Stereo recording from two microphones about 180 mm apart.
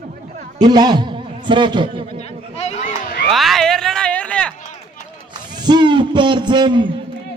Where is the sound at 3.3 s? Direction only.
Centre (ahead or behind).